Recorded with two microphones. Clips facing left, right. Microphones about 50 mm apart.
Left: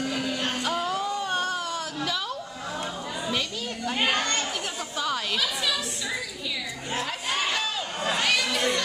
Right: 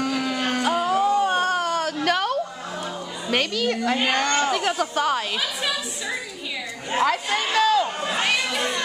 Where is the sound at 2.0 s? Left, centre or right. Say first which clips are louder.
Right 9 dB; right.